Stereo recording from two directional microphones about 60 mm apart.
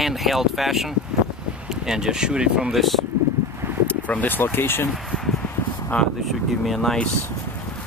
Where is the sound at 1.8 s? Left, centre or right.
Centre.